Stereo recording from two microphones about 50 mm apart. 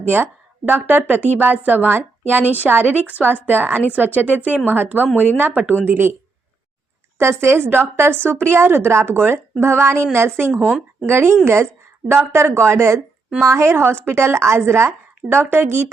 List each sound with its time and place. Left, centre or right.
0.6 s a woman's voice: right
2.4 s speech: left
2.6 s a woman's voice: right
5.8 s speech: right
7.2 s speech: right
10.5 s speech: left
11.0 s a woman's voice: right
12.5 s speech: right